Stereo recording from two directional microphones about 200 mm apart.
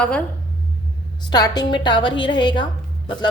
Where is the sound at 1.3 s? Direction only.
20° left (ahead or behind).